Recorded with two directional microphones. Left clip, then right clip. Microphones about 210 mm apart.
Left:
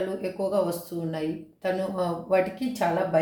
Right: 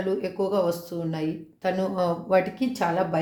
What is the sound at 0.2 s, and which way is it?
A woman's voice, 35° right (ahead or behind).